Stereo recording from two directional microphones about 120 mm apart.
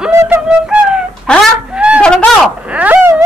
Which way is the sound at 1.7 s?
10° right (ahead or behind).